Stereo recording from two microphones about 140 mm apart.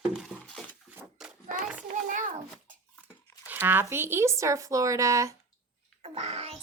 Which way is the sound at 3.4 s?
15° right (ahead or behind).